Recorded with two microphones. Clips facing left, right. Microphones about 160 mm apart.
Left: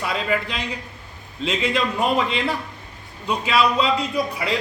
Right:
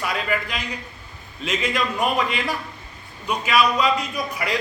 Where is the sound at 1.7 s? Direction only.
25° left (ahead or behind).